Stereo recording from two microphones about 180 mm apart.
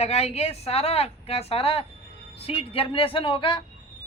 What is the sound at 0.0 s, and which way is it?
A woman's voice, 35° left (ahead or behind).